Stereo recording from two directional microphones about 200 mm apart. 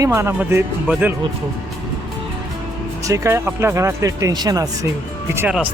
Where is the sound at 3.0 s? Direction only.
15° right (ahead or behind).